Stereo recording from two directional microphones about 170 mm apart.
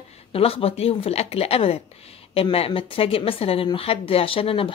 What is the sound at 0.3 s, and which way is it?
Speech, 35° left (ahead or behind).